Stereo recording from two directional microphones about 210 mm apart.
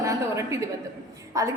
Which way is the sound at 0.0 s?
15° right (ahead or behind).